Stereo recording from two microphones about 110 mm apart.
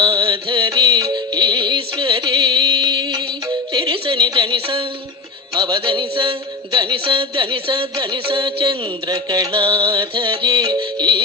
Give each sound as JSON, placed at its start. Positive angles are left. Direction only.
{"t": 0.0, "sound": "music", "side_deg": -50}
{"t": 0.7, "sound": "music", "side_deg": -35}
{"t": 3.9, "sound": "a sound", "side_deg": -55}
{"t": 4.2, "sound": "speech", "side_deg": -45}
{"t": 5.5, "sound": "music", "side_deg": -40}
{"t": 8.3, "sound": "music", "side_deg": -50}
{"t": 9.5, "sound": "music", "side_deg": -50}